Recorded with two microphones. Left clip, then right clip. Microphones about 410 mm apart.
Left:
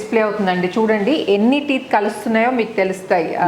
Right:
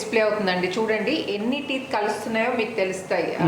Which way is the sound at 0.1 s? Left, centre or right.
Left.